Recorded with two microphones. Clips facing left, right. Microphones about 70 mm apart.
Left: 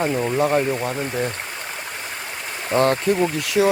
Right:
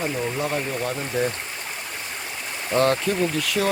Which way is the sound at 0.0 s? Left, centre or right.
Left.